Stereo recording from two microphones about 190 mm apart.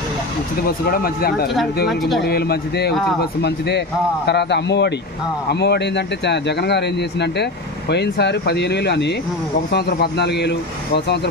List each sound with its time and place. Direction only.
0.7 s speech: 50° left (ahead or behind)
1.9 s speech: centre (ahead or behind)
2.2 s speech: 55° left (ahead or behind)